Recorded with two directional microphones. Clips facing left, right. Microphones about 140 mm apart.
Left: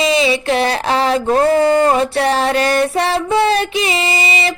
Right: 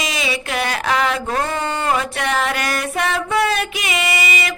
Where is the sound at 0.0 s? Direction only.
30° left (ahead or behind).